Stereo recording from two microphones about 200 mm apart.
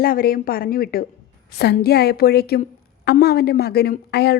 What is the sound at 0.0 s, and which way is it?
A woman's voice, 45° left (ahead or behind).